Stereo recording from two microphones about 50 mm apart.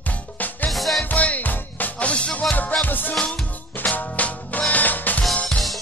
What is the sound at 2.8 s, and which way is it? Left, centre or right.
Music, left.